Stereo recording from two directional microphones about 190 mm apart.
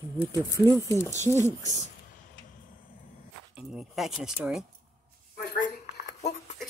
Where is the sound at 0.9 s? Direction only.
15° left (ahead or behind).